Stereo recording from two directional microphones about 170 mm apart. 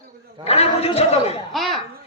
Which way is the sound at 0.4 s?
35° left (ahead or behind).